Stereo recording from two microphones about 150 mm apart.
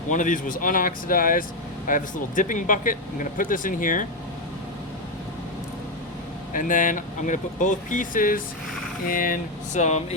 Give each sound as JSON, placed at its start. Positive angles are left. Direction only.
{"t": 0.1, "sound": "speech", "side_deg": 60}
{"t": 6.5, "sound": "speech", "side_deg": 60}